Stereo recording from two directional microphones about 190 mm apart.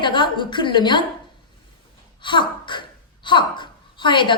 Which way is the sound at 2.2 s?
25° left (ahead or behind).